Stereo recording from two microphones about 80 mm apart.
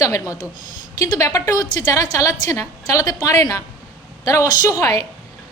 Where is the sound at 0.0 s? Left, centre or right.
Left.